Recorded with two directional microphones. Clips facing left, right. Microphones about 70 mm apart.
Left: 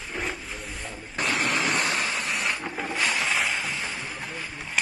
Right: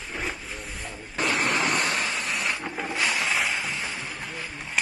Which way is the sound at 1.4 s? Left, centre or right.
Right.